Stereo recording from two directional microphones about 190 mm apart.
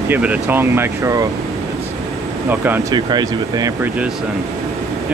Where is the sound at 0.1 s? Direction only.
10° right (ahead or behind).